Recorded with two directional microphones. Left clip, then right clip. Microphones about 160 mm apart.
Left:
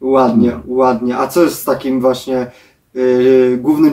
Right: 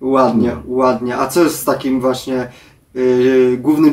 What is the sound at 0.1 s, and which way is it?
Speech, 15° right (ahead or behind).